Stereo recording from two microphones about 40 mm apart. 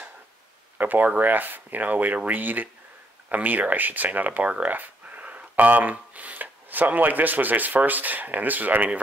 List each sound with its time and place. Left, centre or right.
0.7 s speech: right